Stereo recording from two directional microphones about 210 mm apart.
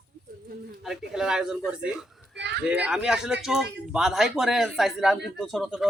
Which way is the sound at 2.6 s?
5° right (ahead or behind).